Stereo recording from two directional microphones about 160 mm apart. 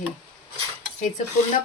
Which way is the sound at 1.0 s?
50° left (ahead or behind).